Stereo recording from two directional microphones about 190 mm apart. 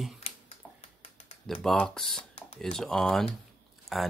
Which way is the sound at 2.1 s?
30° left (ahead or behind).